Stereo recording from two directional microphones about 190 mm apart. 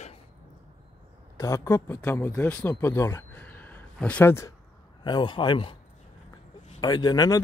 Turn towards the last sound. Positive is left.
turn(degrees=20)  # may be behind; listen again after turning